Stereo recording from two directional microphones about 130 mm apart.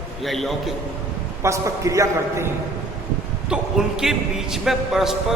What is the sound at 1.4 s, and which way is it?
A man's voice, 25° right (ahead or behind).